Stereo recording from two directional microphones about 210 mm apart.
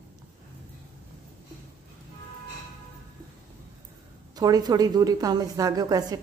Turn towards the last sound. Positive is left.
turn(degrees=-15)  # may be behind; listen again after turning